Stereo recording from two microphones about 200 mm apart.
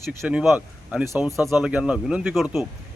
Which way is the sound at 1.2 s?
15° left (ahead or behind).